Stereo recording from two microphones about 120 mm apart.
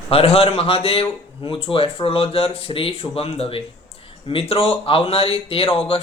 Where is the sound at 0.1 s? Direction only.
55° left (ahead or behind).